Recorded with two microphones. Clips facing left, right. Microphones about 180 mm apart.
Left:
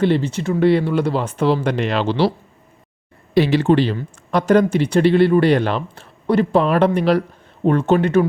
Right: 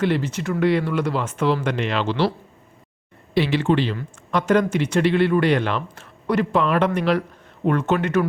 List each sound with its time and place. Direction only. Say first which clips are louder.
0.0 s speech: left 4 dB; 30° left (ahead or behind)
3.3 s speech: left 5 dB; 40° left (ahead or behind)